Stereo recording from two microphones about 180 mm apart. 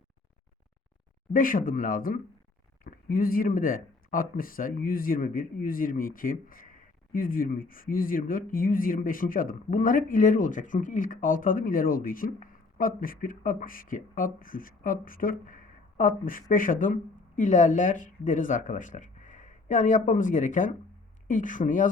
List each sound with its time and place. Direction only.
1.3 s speech: 50° left (ahead or behind)